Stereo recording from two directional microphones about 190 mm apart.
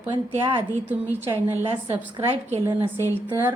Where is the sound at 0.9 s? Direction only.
10° right (ahead or behind).